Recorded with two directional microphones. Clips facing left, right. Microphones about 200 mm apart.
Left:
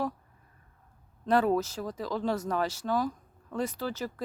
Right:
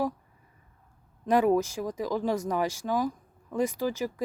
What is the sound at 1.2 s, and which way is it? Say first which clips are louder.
A woman's voice: right 2 dB; 15° right (ahead or behind).